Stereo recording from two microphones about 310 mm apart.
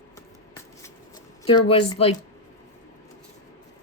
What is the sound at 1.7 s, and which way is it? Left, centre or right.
Speech, centre.